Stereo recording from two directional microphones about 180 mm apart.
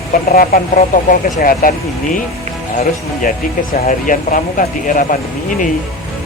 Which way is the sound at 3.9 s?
45° left (ahead or behind).